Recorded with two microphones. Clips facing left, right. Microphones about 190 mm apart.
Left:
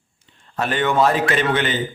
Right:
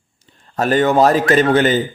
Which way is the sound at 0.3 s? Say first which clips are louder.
Right 7 dB; 40° right (ahead or behind).